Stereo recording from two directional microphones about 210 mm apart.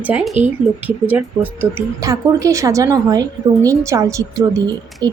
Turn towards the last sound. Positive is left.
turn(degrees=-15)  # may be behind; listen again after turning